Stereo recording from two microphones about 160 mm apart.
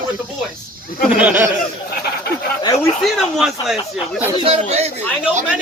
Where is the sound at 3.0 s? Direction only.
Centre (ahead or behind).